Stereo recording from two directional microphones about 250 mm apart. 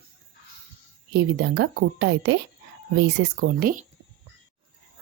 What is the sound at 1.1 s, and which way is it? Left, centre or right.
A woman's voice, right.